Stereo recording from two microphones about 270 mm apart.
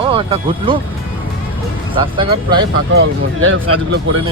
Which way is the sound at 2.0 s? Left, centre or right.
Centre.